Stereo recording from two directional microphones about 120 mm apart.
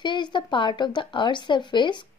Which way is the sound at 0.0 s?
40° left (ahead or behind).